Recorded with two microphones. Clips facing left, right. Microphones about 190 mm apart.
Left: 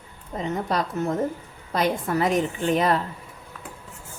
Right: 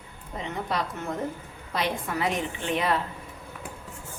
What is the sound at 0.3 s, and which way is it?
A woman's voice, 40° left (ahead or behind).